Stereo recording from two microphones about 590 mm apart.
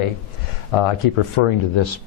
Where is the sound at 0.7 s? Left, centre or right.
Left.